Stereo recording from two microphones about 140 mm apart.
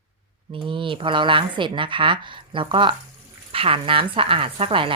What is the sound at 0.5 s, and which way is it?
Speech, 35° right (ahead or behind).